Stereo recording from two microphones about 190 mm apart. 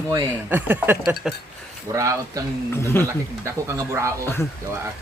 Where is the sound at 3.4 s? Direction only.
15° right (ahead or behind).